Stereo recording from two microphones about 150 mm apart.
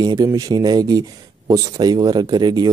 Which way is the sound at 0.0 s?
25° right (ahead or behind).